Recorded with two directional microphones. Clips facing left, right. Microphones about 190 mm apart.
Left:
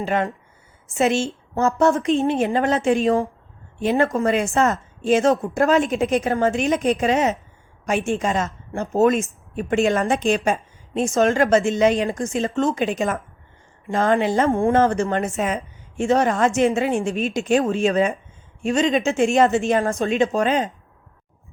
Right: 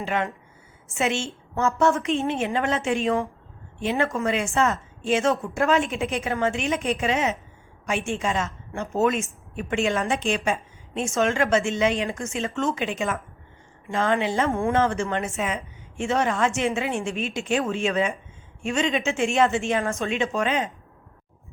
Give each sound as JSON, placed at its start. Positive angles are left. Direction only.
{"t": 0.0, "sound": "a woman's voice", "side_deg": 40}